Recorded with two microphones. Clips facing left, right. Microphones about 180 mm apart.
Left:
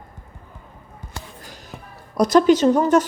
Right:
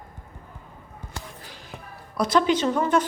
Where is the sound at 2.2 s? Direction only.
45° left (ahead or behind).